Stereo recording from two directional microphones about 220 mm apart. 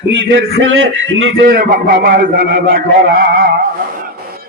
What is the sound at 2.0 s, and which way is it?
Speech, 40° right (ahead or behind).